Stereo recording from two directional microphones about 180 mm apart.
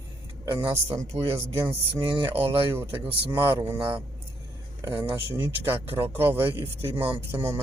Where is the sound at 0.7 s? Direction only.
15° right (ahead or behind).